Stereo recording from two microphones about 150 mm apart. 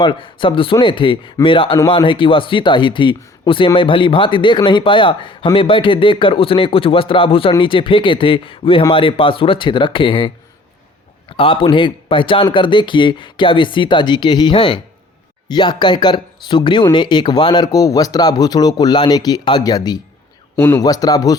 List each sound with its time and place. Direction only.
0.0 s speech: 35° left (ahead or behind)
11.3 s speech: 35° left (ahead or behind)